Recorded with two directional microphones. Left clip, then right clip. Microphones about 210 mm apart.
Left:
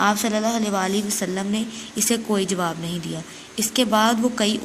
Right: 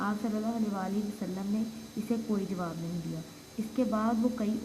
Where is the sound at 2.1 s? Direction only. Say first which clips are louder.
Left 11 dB; 35° left (ahead or behind).